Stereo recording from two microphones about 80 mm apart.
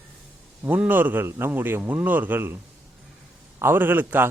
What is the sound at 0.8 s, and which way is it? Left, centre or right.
A man's voice, right.